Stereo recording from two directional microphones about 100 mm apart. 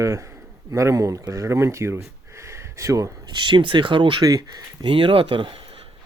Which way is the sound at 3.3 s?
55° right (ahead or behind).